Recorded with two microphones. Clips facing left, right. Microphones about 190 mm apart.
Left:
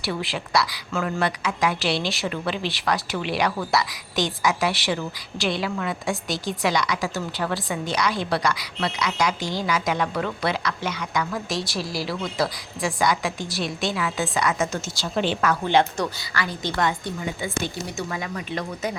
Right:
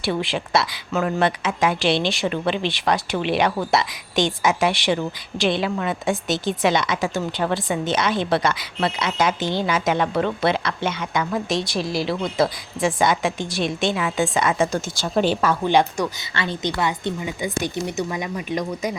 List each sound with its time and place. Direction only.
0.0 s speech: 25° right (ahead or behind)
14.9 s a woman's voice: 45° right (ahead or behind)
15.6 s speech: 15° right (ahead or behind)
16.3 s speech: 25° right (ahead or behind)